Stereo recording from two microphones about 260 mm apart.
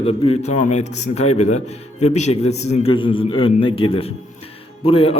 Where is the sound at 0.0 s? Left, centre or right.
Left.